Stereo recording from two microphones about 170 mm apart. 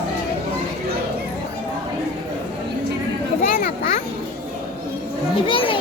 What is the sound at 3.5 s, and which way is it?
Children playing, 55° left (ahead or behind).